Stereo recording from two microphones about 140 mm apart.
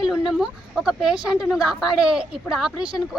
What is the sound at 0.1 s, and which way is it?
A woman's voice, 5° right (ahead or behind).